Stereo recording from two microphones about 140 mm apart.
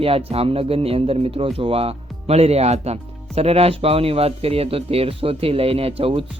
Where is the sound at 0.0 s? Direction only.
45° right (ahead or behind).